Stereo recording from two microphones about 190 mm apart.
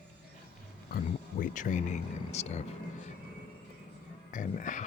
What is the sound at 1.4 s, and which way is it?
Speech, 45° left (ahead or behind).